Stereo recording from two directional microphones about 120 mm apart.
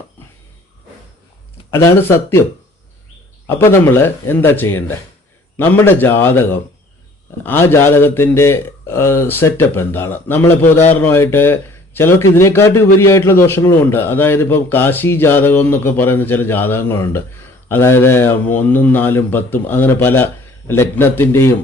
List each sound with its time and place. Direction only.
1.7 s speech: 20° left (ahead or behind)
3.4 s speech: 20° left (ahead or behind)